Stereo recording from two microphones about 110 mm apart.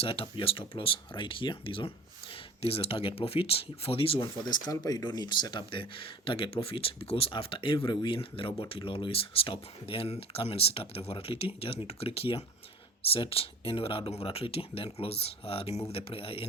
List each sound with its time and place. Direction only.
0.0 s speech: 55° left (ahead or behind)
2.3 s speech: 60° left (ahead or behind)
4.4 s speech: 40° left (ahead or behind); by 16.5 s 60° left (ahead or behind)